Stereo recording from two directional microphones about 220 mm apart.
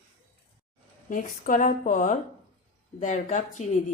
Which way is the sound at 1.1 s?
35° left (ahead or behind).